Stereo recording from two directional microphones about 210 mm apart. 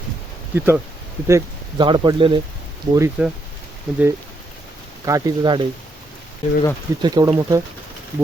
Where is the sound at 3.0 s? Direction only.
5° right (ahead or behind).